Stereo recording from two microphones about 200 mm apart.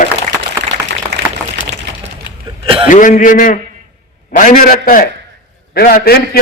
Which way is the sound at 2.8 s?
40° left (ahead or behind).